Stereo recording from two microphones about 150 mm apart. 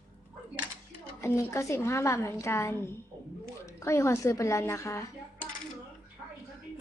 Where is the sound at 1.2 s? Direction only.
20° left (ahead or behind).